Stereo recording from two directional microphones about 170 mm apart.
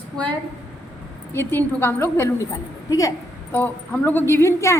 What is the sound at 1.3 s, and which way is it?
A woman's voice, 15° left (ahead or behind).